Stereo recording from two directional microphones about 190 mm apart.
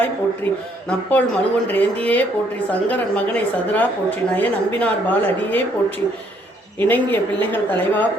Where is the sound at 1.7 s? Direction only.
10° left (ahead or behind).